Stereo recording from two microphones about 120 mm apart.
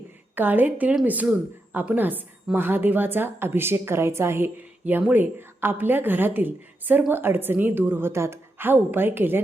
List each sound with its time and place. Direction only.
0.3 s a woman's voice: 15° right (ahead or behind)